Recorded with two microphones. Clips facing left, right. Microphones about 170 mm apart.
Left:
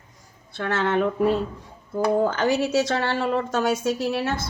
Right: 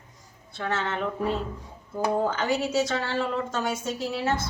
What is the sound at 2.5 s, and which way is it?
Speech, 75° left (ahead or behind).